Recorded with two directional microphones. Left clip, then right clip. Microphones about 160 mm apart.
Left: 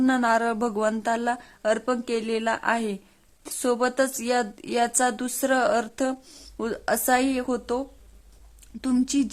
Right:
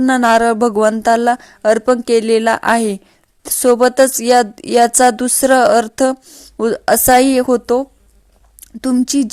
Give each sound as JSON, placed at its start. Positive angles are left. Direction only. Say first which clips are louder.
{"t": 0.0, "sound": "speech", "louder": "right 11 dB", "side_deg": -40}
{"t": 6.2, "sound": "speech", "louder": "right 8 dB", "side_deg": -25}
{"t": 6.6, "sound": "speech", "louder": "right 13 dB", "side_deg": -40}